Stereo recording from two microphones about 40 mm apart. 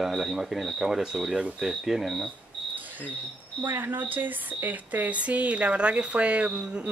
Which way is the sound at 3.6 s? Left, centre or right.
Right.